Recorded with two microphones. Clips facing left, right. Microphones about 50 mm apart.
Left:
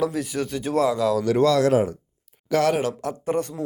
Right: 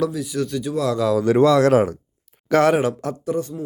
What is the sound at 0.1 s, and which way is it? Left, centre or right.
Speech, left.